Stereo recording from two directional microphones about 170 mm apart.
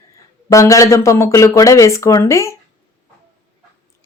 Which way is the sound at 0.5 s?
20° left (ahead or behind).